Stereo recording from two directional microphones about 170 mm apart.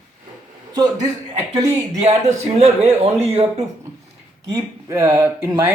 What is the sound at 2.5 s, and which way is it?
Speech, 35° right (ahead or behind).